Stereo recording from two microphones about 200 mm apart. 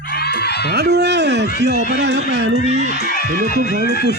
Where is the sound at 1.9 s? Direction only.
60° right (ahead or behind).